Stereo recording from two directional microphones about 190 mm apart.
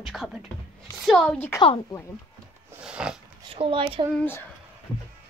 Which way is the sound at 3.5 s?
30° right (ahead or behind).